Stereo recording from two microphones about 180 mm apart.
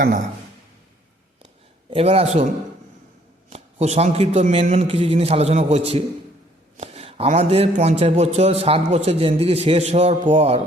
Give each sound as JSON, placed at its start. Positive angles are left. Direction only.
{"t": 1.9, "sound": "a man's voice", "side_deg": -35}
{"t": 3.5, "sound": "a man's voice", "side_deg": -35}